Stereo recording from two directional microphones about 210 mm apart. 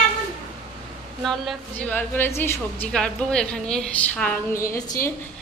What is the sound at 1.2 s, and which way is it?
A woman's voice, centre (ahead or behind).